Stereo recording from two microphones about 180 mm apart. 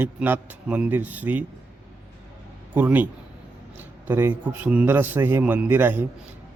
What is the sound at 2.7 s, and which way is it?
A man's voice, 10° right (ahead or behind).